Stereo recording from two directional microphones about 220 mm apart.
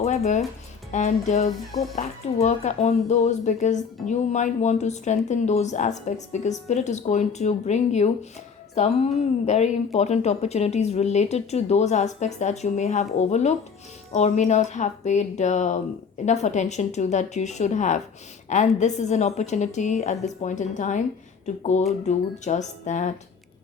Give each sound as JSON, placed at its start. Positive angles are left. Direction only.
{"t": 0.0, "sound": "a woman's voice", "side_deg": 30}